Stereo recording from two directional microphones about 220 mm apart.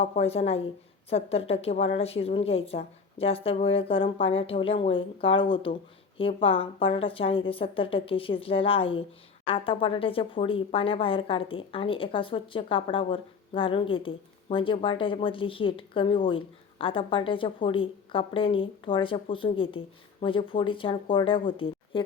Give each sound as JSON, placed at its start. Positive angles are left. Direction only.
{"t": 0.0, "sound": "speech", "side_deg": 25}